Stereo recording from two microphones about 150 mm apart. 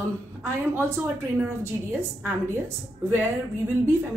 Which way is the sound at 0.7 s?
15° right (ahead or behind).